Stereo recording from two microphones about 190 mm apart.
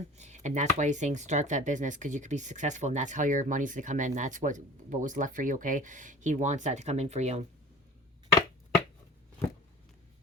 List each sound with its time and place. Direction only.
0.2 s speech: 40° right (ahead or behind)